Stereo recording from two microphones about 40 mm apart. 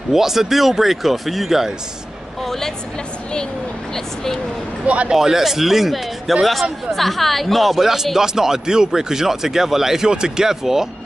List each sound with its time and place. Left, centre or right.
0.1 s speech: centre
2.4 s a woman's voice: centre
3.9 s speech: centre
4.8 s speech: right
5.1 s speech: centre